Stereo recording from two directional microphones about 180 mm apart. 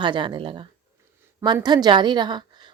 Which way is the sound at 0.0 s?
25° right (ahead or behind).